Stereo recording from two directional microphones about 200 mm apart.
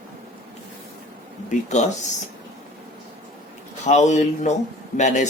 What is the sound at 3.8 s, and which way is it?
Speech, 35° left (ahead or behind).